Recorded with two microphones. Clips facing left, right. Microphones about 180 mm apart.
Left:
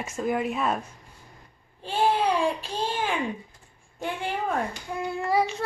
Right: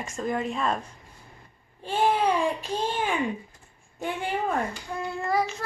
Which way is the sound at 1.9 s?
10° left (ahead or behind).